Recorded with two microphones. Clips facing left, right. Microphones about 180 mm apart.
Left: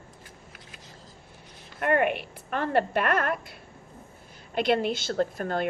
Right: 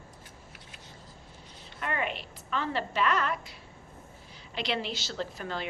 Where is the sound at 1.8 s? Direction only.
55° left (ahead or behind).